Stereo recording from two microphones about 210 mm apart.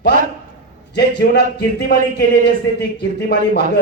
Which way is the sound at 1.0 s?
50° left (ahead or behind).